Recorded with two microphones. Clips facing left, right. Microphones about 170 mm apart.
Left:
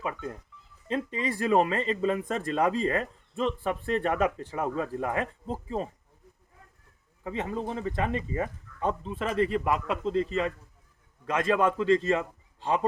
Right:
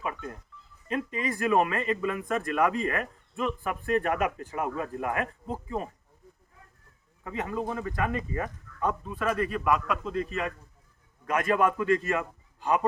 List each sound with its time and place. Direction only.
0.9 s speech: 30° left (ahead or behind)
7.3 s speech: 25° left (ahead or behind)